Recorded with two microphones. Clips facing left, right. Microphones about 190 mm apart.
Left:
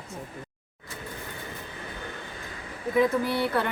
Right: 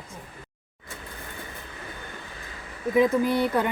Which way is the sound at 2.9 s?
20° right (ahead or behind).